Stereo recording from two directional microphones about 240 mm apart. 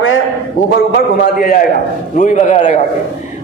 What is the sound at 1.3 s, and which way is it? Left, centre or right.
A man's voice, left.